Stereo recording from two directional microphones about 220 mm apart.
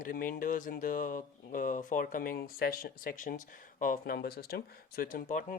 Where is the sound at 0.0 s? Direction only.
40° left (ahead or behind).